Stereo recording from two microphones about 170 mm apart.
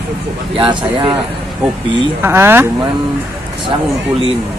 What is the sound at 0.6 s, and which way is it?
Speech, 30° right (ahead or behind).